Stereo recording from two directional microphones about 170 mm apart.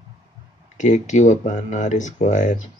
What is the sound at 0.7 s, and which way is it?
Speech, 45° left (ahead or behind).